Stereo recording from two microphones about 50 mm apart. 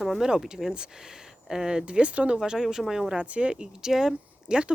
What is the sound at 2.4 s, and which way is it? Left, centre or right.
Speech, centre.